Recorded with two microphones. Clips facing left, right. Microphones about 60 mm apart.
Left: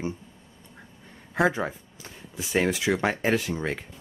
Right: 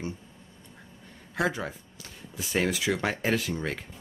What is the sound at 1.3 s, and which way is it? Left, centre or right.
Speech, left.